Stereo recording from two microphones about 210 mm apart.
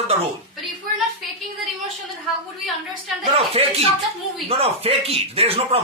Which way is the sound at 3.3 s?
30° right (ahead or behind).